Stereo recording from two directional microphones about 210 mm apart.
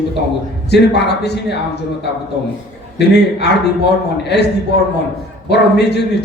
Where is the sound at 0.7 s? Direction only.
50° left (ahead or behind).